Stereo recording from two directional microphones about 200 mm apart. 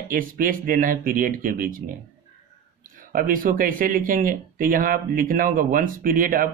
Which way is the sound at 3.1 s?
45° right (ahead or behind).